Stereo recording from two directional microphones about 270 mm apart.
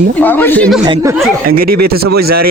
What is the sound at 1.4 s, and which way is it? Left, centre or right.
Speech, right.